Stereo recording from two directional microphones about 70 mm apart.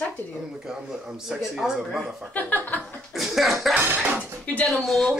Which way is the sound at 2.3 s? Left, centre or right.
Left.